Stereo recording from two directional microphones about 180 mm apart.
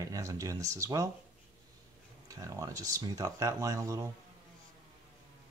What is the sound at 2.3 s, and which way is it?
Speech, 20° right (ahead or behind).